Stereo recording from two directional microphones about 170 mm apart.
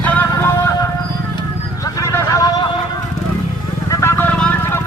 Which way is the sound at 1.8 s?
20° left (ahead or behind).